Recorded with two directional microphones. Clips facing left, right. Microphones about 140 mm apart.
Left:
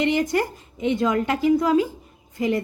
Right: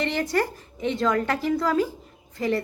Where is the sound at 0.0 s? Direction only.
20° left (ahead or behind).